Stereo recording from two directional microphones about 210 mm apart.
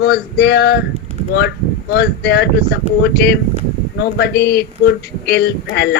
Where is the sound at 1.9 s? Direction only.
50° left (ahead or behind).